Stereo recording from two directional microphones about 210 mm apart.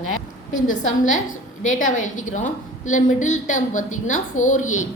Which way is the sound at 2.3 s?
35° left (ahead or behind).